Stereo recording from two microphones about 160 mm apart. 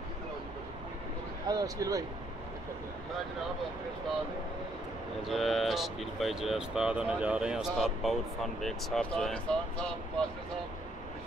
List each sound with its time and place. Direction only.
1.5 s speech: 20° right (ahead or behind)
5.2 s speech: centre (ahead or behind)